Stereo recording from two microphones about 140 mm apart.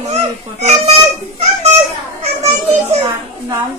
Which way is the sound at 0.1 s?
55° right (ahead or behind).